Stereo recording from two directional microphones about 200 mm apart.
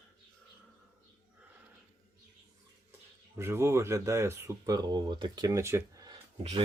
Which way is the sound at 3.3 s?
15° right (ahead or behind).